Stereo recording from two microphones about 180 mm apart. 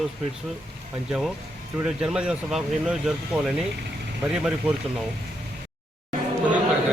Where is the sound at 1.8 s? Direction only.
5° right (ahead or behind).